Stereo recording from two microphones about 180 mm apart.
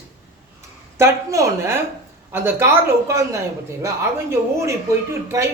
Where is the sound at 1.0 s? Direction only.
15° right (ahead or behind).